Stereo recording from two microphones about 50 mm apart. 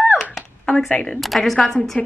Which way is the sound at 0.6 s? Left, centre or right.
Centre.